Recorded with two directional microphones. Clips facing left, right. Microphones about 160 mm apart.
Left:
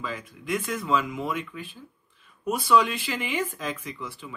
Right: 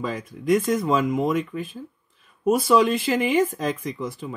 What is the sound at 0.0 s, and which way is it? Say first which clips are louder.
Speech: right 7 dB; 40° right (ahead or behind).